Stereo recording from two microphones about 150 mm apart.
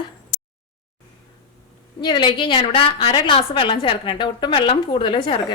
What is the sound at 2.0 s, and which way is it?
A woman's voice, 30° left (ahead or behind).